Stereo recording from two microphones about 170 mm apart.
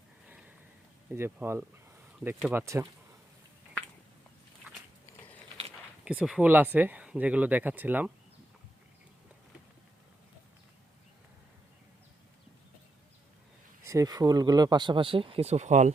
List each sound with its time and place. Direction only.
1.1 s speech: 15° right (ahead or behind)
6.1 s speech: 5° right (ahead or behind)
13.8 s speech: 20° right (ahead or behind); by 15.9 s 45° right (ahead or behind)